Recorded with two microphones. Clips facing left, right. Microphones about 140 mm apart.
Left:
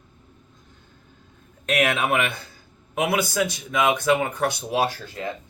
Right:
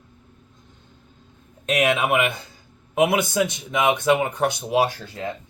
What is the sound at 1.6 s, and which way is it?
A man's voice, 20° right (ahead or behind).